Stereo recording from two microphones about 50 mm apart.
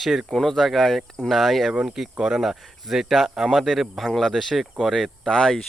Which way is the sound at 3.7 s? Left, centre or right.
Centre.